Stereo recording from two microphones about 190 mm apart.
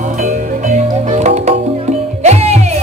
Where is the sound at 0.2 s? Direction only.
40° right (ahead or behind).